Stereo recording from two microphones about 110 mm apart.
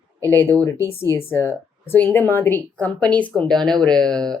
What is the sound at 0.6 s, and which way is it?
Speech, 25° left (ahead or behind).